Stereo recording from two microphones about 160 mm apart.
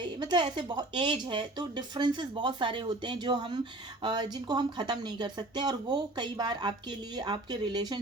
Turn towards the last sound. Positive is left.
turn(degrees=-30)  # may be behind; listen again after turning